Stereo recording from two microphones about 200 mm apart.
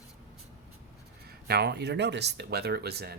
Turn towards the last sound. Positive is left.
turn(degrees=-50)  # may be behind; listen again after turning